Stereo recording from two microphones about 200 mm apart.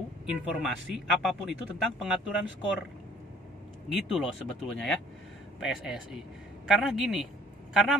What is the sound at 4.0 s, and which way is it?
Speech, centre (ahead or behind).